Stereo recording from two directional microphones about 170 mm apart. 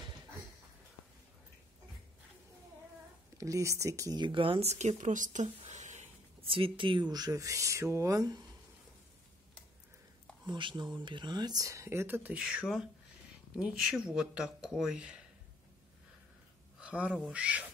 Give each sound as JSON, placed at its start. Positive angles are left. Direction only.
{"t": 3.3, "sound": "speech", "side_deg": -20}
{"t": 10.4, "sound": "speech", "side_deg": -25}
{"t": 16.8, "sound": "speech", "side_deg": -5}